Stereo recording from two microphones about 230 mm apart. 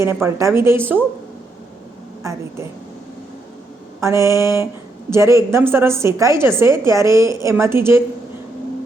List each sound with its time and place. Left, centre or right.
0.0 s a woman's voice: centre
2.2 s a woman's voice: centre
4.0 s a woman's voice: centre